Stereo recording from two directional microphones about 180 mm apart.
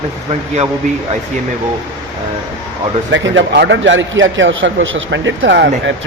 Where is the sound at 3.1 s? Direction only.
85° right.